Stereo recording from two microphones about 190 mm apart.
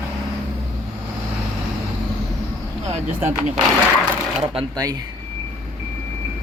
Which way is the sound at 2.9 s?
40° right (ahead or behind).